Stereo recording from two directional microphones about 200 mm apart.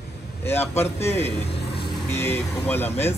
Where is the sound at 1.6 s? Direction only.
55° left (ahead or behind).